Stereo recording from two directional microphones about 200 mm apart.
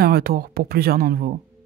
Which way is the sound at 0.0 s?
50° right (ahead or behind).